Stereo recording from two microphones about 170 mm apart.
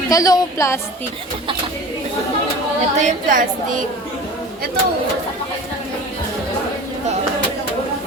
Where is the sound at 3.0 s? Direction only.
50° right (ahead or behind).